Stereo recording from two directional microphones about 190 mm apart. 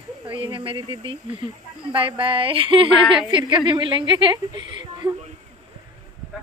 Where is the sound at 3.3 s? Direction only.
25° right (ahead or behind).